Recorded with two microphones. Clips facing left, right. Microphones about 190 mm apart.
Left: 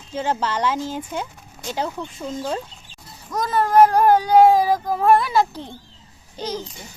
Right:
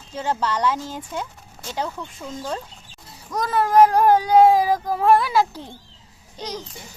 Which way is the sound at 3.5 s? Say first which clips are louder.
Left 1 dB; 5° right (ahead or behind).